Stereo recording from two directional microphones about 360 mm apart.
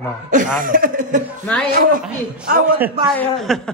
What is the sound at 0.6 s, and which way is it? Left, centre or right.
Speech, right.